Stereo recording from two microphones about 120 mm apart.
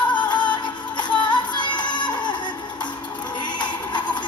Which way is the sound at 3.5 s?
40° left (ahead or behind).